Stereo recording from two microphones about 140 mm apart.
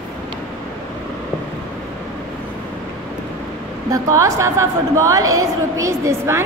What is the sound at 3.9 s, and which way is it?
A woman's voice, 20° right (ahead or behind).